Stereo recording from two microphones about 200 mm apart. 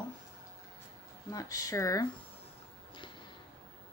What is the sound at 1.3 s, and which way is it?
Speech, 15° left (ahead or behind).